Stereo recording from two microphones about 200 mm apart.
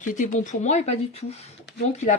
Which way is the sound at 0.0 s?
40° left (ahead or behind).